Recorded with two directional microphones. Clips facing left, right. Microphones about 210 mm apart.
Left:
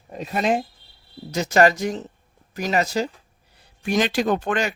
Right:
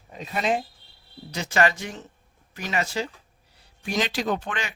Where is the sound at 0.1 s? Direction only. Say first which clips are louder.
Left 4 dB; 45° left (ahead or behind).